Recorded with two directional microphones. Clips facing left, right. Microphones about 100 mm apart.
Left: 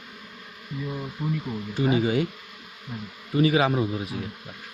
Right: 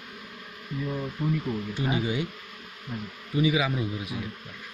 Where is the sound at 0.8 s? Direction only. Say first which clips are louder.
Right 1 dB; 5° left (ahead or behind).